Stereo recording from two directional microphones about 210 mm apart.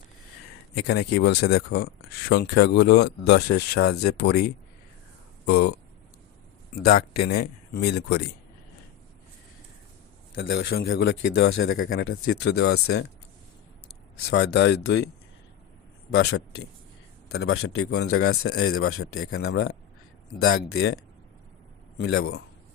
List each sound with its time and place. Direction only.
0.9 s speech: 50° left (ahead or behind)
5.5 s speech: 50° left (ahead or behind)
6.7 s speech: 45° left (ahead or behind)
10.3 s speech: 60° left (ahead or behind)
14.3 s speech: 55° left (ahead or behind)
16.1 s speech: 55° left (ahead or behind)
17.4 s speech: 80° left
20.7 s speech: 50° left (ahead or behind)
21.9 s speech: 60° left (ahead or behind)